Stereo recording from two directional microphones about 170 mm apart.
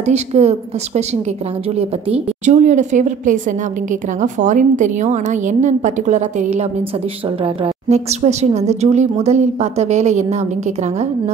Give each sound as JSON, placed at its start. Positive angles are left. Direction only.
{"t": 0.0, "sound": "a woman's voice", "side_deg": -40}
{"t": 2.4, "sound": "a woman's voice", "side_deg": -45}